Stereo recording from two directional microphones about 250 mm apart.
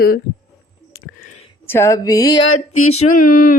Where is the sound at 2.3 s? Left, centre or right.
Left.